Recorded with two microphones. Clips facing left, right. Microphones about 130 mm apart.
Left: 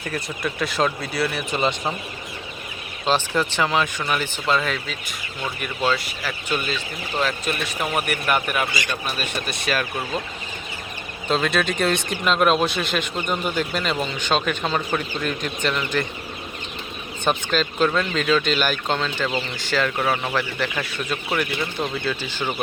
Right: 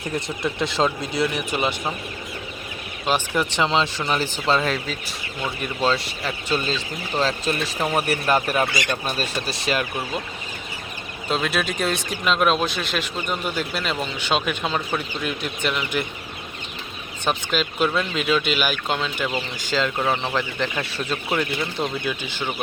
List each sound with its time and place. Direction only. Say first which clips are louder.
0.1 s speech: right 2 dB; 25° right (ahead or behind)
3.1 s speech: left 1 dB; 15° right (ahead or behind)
11.3 s speech: left 2 dB; 5° right (ahead or behind)
17.2 s speech: left 2 dB; 5° right (ahead or behind)
19.5 s speech: right 1 dB; 15° right (ahead or behind)
22.4 s speech: left 2 dB; 5° left (ahead or behind)